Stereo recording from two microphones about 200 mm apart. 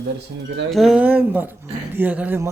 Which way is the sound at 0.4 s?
65° right (ahead or behind).